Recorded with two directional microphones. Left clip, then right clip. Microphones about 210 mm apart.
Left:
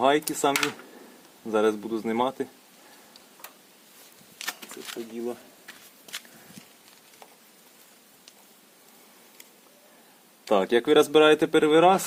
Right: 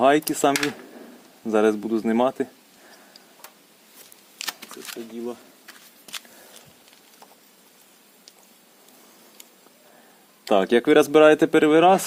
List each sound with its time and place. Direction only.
0.0 s speech: 45° right (ahead or behind)
4.4 s shuffling cards: 20° right (ahead or behind)
4.9 s speech: 5° right (ahead or behind)
5.6 s walk: 15° right (ahead or behind)
10.5 s speech: 40° right (ahead or behind)